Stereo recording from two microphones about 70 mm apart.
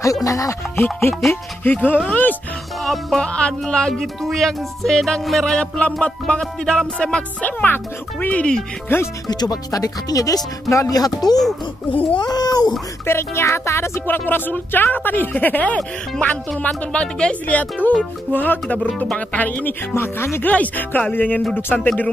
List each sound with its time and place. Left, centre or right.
0.0 s music: left
1.3 s speech: left
2.0 s music: left
2.8 s music: centre
7.6 s speech: left
8.8 s speech: left
9.3 s speech: left
12.2 s a child's voice: left
13.0 s speech: left
14.0 s speech: left
19.9 s speech: left
20.4 s speech: left
21.8 s music: centre